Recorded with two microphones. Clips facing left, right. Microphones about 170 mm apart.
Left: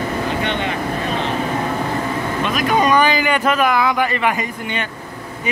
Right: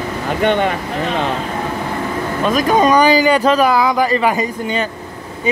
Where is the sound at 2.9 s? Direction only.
35° right (ahead or behind).